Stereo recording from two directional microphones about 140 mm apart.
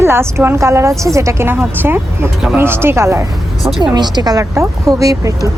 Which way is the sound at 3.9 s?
30° right (ahead or behind).